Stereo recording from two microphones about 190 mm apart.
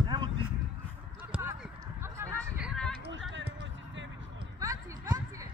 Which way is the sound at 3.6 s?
75° right (ahead or behind).